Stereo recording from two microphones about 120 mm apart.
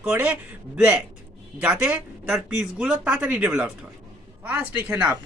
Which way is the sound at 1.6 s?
10° right (ahead or behind).